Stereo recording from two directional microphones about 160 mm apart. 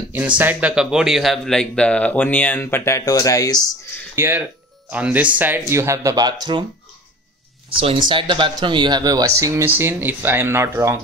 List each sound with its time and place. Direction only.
0.4 s speech: 10° right (ahead or behind); by 3.7 s 25° left (ahead or behind)
4.1 s speech: 15° right (ahead or behind)
7.7 s speech: 35° right (ahead or behind); by 11.0 s 15° right (ahead or behind)